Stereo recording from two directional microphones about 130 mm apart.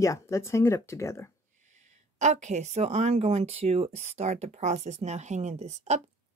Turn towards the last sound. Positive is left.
turn(degrees=-60)  # may be behind; listen again after turning